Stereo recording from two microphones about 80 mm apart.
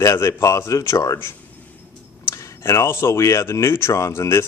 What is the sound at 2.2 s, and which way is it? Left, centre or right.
Speech, left.